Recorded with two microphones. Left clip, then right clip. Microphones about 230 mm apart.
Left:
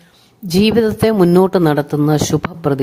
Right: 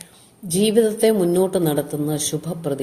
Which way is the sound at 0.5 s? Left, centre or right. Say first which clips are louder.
Left 3 dB; left.